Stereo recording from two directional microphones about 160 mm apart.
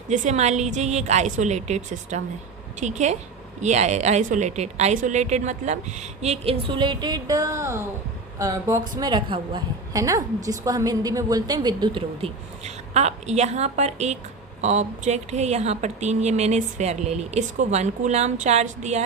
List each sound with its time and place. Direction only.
0.1 s a woman's voice: 50° right (ahead or behind)